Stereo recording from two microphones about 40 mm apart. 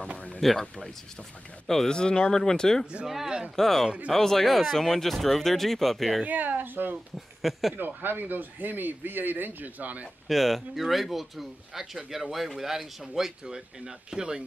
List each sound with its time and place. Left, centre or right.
0.4 s speech: centre
1.7 s speech: centre
2.3 s speech: centre
6.2 s speech: right
10.2 s speech: centre